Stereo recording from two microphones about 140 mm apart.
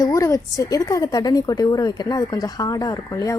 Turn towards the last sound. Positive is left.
turn(degrees=20)  # may be behind; listen again after turning